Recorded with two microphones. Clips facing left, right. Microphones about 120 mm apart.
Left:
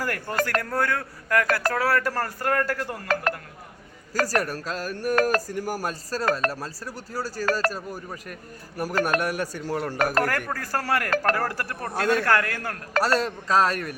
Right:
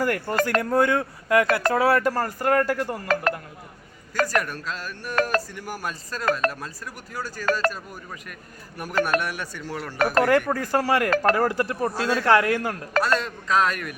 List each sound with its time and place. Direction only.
0.0 s speech: 15° right (ahead or behind)
4.1 s speech: 35° left (ahead or behind)
10.5 s speech: 15° right (ahead or behind)
11.9 s speech: 60° left (ahead or behind)
12.2 s speech: 20° right (ahead or behind)
13.0 s speech: 35° left (ahead or behind)